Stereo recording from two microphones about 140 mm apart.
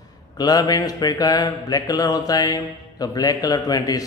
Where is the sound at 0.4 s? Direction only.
25° left (ahead or behind).